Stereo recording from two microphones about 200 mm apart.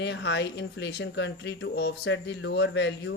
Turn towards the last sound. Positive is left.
turn(degrees=60)  # may be behind; listen again after turning